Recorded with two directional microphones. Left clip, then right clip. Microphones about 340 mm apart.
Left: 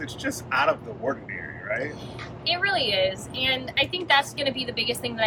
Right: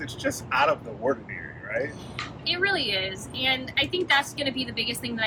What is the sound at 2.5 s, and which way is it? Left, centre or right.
A woman's voice, centre.